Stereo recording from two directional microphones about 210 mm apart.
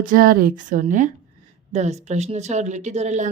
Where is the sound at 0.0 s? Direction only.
40° right (ahead or behind).